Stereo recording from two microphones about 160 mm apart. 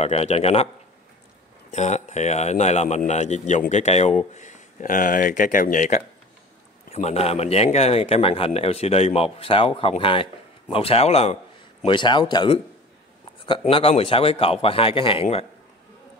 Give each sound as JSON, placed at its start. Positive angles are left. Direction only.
{"t": 0.0, "sound": "a man's voice", "side_deg": 40}
{"t": 1.7, "sound": "a man's voice", "side_deg": 45}
{"t": 6.9, "sound": "a man's voice", "side_deg": 40}
{"t": 11.8, "sound": "a man's voice", "side_deg": 30}